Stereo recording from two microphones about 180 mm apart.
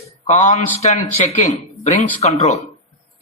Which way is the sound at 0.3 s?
40° left (ahead or behind).